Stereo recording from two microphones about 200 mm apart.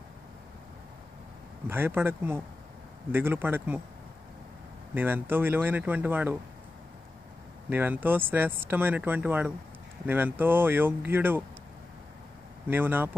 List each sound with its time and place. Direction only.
1.7 s speech: 10° right (ahead or behind)
4.9 s speech: 10° right (ahead or behind)
7.7 s speech: 10° right (ahead or behind)
12.6 s speech: 10° right (ahead or behind)